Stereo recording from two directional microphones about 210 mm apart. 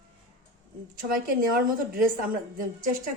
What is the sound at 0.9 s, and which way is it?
A woman's voice, 40° right (ahead or behind).